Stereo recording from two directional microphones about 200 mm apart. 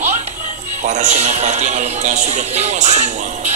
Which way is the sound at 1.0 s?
35° right (ahead or behind).